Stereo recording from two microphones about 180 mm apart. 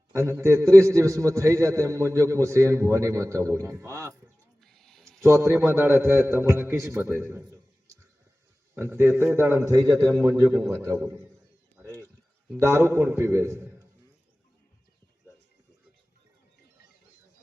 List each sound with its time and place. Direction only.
0.1 s a man's voice: 15° right (ahead or behind)
4.6 s a sound: centre (ahead or behind)
5.2 s a man's voice: 15° right (ahead or behind)
8.7 s a man's voice: 10° right (ahead or behind)
11.8 s a sound: 15° right (ahead or behind)
12.5 s a man's voice: 15° right (ahead or behind)